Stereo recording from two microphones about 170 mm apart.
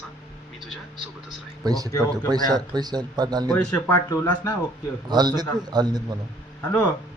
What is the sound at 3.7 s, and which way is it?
Speech, 25° left (ahead or behind).